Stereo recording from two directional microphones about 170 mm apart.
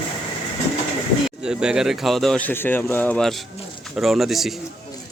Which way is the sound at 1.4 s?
5° right (ahead or behind).